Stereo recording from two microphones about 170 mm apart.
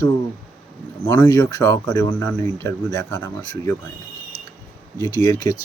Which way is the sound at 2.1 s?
10° left (ahead or behind).